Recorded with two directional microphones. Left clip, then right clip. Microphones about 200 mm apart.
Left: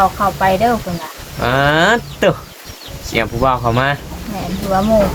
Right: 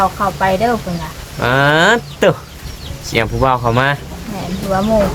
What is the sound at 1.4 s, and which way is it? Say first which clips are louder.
Speech: right 1 dB; 25° right (ahead or behind).